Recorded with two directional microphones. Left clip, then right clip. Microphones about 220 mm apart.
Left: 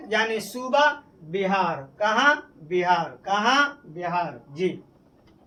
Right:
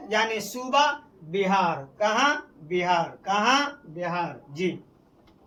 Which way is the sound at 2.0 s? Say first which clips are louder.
Left 3 dB; 5° left (ahead or behind).